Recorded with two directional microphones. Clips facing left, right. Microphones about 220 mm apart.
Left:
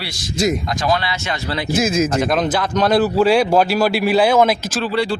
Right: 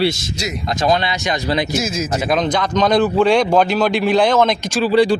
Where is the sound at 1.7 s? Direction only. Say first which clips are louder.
Left 4 dB; 55° left (ahead or behind).